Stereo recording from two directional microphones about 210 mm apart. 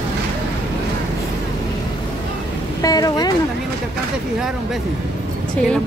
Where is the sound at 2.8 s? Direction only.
20° left (ahead or behind).